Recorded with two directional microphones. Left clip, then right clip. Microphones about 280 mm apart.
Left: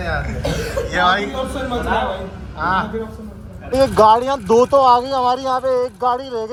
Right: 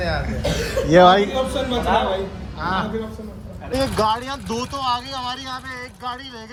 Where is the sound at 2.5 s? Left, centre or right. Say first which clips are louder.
Left 5 dB; centre.